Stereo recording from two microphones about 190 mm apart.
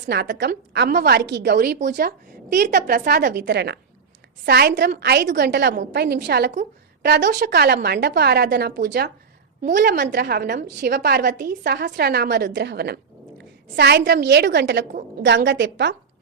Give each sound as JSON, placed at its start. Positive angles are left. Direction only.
{"t": 0.0, "sound": "a woman's voice", "side_deg": -60}
{"t": 6.5, "sound": "a woman's voice", "side_deg": -40}
{"t": 7.3, "sound": "a woman's voice", "side_deg": -55}
{"t": 9.6, "sound": "a woman's voice", "side_deg": -45}